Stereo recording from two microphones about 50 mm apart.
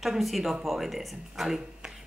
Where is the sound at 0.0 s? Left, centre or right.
Centre.